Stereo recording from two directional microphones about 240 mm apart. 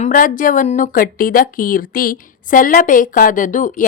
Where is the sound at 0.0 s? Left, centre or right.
Left.